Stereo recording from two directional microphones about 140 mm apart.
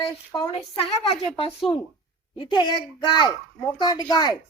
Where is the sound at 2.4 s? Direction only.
35° left (ahead or behind).